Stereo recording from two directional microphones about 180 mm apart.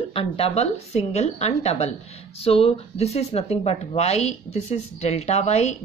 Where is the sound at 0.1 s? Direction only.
35° left (ahead or behind).